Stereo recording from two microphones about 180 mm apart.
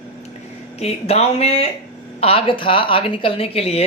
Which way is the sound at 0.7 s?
35° left (ahead or behind).